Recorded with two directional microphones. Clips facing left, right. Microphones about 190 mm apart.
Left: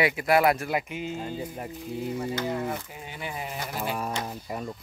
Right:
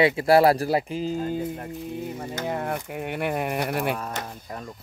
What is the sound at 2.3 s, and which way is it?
Speech, 60° right (ahead or behind).